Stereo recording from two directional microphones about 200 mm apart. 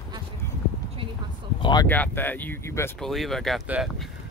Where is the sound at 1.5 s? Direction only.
25° left (ahead or behind).